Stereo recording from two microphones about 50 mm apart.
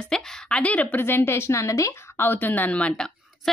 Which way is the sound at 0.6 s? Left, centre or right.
Left.